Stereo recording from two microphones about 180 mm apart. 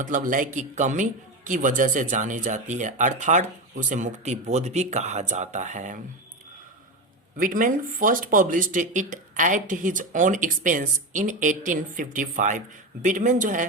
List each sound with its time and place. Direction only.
0.0 s speech: 45° right (ahead or behind)
7.3 s speech: 50° right (ahead or behind)